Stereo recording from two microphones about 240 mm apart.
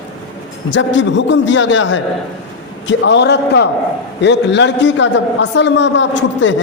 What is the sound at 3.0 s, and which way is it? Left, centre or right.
A man's voice, left.